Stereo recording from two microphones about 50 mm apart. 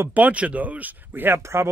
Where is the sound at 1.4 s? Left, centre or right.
Right.